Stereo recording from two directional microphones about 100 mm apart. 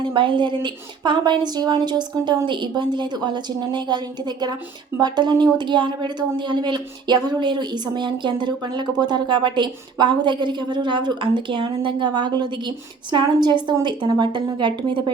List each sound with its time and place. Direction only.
0.0 s speech: 55° right (ahead or behind)